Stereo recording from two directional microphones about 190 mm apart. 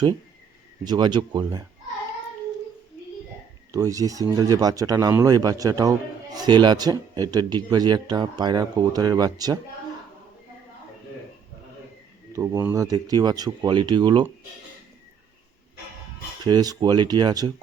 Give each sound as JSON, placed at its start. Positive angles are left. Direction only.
{"t": 0.9, "sound": "speech", "side_deg": -20}
{"t": 3.7, "sound": "speech", "side_deg": -15}
{"t": 12.3, "sound": "speech", "side_deg": -15}
{"t": 16.4, "sound": "speech", "side_deg": -20}